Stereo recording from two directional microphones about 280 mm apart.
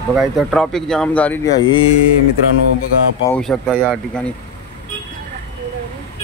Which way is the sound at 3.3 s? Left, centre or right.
Centre.